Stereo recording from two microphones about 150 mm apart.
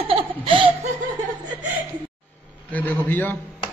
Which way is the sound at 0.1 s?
35° right (ahead or behind).